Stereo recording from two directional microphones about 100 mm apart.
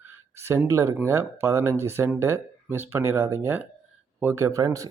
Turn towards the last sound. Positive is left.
turn(degrees=-35)  # may be behind; listen again after turning